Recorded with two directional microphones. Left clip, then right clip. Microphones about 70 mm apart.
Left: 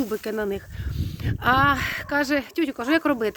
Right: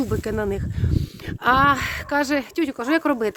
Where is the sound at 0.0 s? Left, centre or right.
Right.